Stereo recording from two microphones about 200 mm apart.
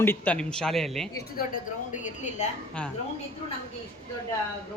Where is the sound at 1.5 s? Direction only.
40° left (ahead or behind).